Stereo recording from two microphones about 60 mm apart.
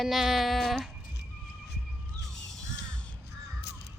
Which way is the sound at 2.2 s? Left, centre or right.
Centre.